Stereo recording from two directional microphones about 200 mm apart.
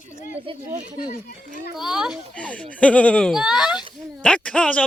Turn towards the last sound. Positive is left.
turn(degrees=5)  # may be behind; listen again after turning